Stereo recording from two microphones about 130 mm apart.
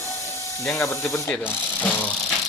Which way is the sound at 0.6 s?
20° left (ahead or behind).